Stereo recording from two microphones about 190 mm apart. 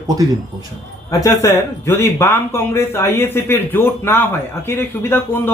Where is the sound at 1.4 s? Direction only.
15° left (ahead or behind).